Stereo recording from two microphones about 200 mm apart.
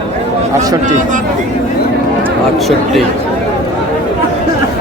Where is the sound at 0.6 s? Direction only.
20° right (ahead or behind).